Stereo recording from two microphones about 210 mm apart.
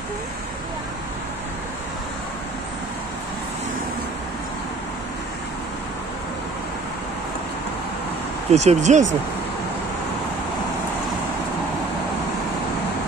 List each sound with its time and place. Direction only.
8.5 s speech: 30° right (ahead or behind)